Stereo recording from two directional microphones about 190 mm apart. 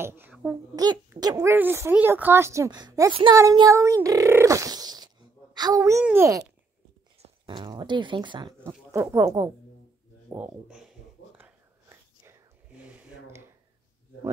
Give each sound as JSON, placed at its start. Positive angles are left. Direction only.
{"t": 0.0, "sound": "a child's voice", "side_deg": -10}
{"t": 0.7, "sound": "speech", "side_deg": -20}
{"t": 7.2, "sound": "speech", "side_deg": -25}
{"t": 11.3, "sound": "whispering", "side_deg": -10}